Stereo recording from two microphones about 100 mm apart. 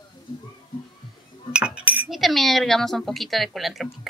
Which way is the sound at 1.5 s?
10° right (ahead or behind).